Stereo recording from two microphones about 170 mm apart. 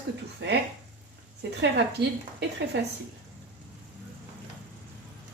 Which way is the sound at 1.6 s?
90° right.